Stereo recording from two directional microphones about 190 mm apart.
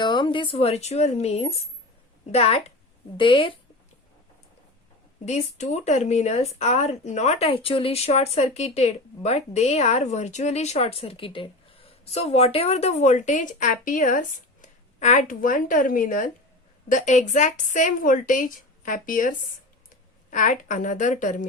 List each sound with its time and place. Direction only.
0.0 s a woman's voice: 25° left (ahead or behind)
5.2 s a woman's voice: 35° left (ahead or behind)
20.3 s speech: 40° left (ahead or behind)